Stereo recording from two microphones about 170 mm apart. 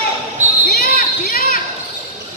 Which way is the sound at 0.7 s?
65° left (ahead or behind).